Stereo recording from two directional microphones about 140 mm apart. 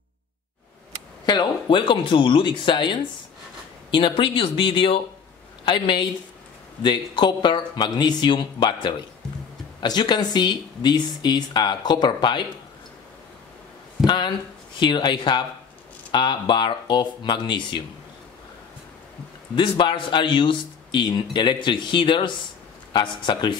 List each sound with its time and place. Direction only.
1.2 s speech: 30° left (ahead or behind)
14.0 s speech: 35° left (ahead or behind)
19.5 s speech: 35° left (ahead or behind)